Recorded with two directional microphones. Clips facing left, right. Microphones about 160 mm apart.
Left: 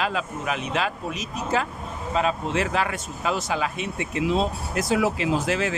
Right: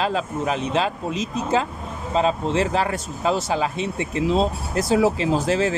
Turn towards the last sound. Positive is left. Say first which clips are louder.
# right 4 dB
turn(degrees=-35)  # may be behind; listen again after turning